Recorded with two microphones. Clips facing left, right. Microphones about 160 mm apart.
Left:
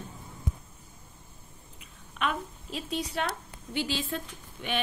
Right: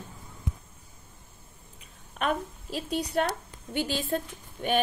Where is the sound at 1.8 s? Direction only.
40° right (ahead or behind).